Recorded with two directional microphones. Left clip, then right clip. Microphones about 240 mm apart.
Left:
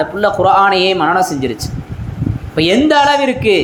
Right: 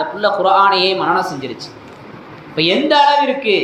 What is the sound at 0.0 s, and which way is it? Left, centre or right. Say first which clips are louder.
A man's voice: left 3 dB; left.